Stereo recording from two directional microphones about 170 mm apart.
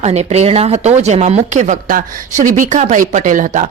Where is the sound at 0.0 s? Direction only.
40° right (ahead or behind).